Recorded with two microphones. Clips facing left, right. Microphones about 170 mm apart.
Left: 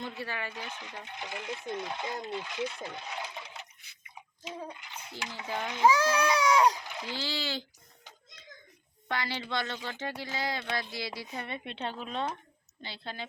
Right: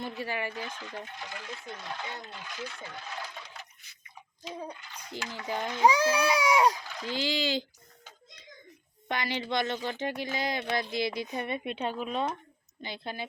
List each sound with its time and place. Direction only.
0.2 s speech: 10° right (ahead or behind)
0.5 s speech: 15° left (ahead or behind)
4.8 s speech: 20° left (ahead or behind)
5.8 s speech: 15° right (ahead or behind)
6.8 s splash: 15° left (ahead or behind)
7.2 s speech: 15° right (ahead or behind)
9.0 s speech: 15° right (ahead or behind)